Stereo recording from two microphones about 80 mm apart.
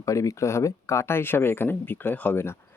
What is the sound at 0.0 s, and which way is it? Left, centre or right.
Speech, left.